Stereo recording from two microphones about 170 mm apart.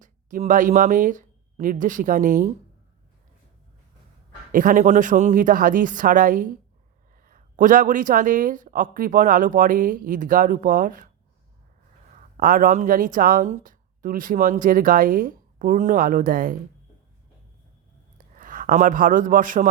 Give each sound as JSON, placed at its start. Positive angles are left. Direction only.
{"t": 0.0, "sound": "speech", "side_deg": -50}
{"t": 4.5, "sound": "speech", "side_deg": -50}
{"t": 12.4, "sound": "speech", "side_deg": -55}
{"t": 18.3, "sound": "a man's voice", "side_deg": -50}